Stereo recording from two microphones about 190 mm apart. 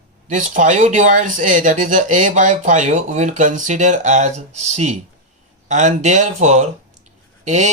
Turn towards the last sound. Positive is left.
turn(degrees=-40)  # may be behind; listen again after turning